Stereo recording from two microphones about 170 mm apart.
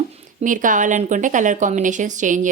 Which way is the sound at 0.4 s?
50° right (ahead or behind).